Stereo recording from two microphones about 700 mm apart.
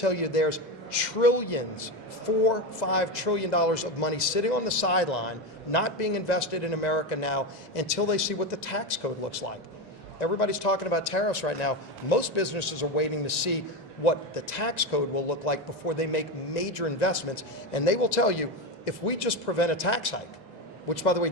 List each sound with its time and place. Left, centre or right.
0.0 s a man's voice: left
10.2 s a man's voice: left